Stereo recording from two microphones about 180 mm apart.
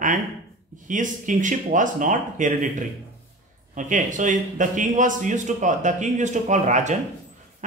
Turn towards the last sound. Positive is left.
turn(degrees=-40)  # may be behind; listen again after turning